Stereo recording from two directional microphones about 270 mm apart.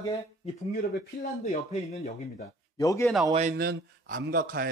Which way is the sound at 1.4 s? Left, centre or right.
Left.